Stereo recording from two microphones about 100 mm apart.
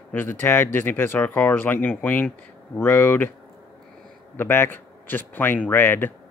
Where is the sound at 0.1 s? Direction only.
20° left (ahead or behind).